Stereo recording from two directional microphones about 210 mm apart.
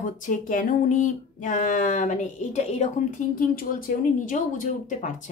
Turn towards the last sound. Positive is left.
turn(degrees=35)  # may be behind; listen again after turning